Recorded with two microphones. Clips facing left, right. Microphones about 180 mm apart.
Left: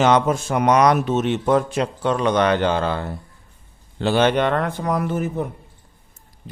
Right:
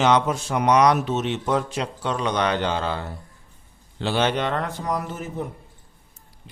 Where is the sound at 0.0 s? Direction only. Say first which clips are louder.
Left 3 dB; 50° left (ahead or behind).